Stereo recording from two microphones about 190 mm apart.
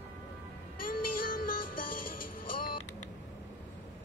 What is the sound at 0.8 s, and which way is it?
Music, 45° left (ahead or behind).